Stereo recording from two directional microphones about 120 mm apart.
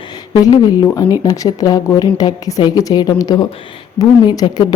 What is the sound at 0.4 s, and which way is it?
A woman's voice, 30° left (ahead or behind).